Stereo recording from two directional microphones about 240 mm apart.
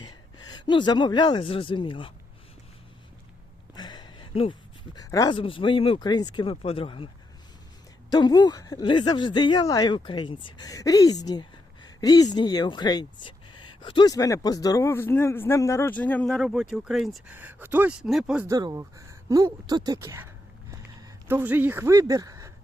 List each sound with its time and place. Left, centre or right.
0.5 s speech: centre
3.8 s a sound: centre
4.9 s speech: centre
8.1 s speech: centre